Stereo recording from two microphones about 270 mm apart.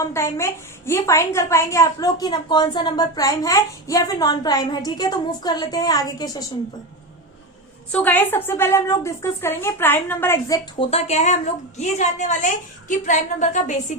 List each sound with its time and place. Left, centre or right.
0.0 s a woman's voice: centre
7.9 s a woman's voice: centre; by 13.7 s left